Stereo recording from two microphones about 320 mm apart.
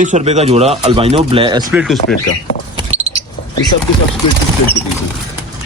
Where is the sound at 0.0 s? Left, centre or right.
Right.